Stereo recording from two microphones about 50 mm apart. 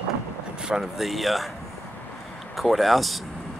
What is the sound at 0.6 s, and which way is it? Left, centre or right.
Vehicle, centre.